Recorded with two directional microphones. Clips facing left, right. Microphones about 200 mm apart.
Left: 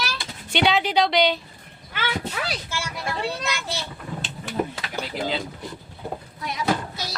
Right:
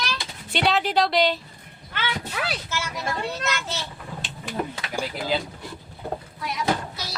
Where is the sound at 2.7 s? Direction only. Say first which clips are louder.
Right 1 dB; 10° left (ahead or behind).